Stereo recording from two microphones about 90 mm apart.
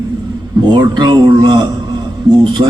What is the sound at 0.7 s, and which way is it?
A man's voice, 50° right (ahead or behind).